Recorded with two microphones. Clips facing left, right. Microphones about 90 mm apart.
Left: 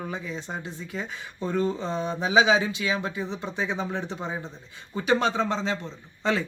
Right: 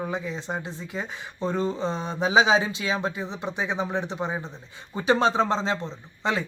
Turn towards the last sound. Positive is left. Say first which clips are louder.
# left 1 dB
turn(degrees=-20)  # may be behind; listen again after turning